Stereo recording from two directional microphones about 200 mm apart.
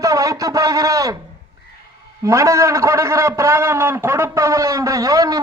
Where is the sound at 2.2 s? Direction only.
15° right (ahead or behind).